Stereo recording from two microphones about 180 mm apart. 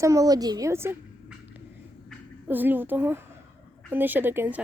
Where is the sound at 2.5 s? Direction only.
10° right (ahead or behind).